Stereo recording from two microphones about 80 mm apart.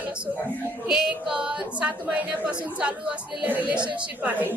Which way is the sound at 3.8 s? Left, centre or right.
Right.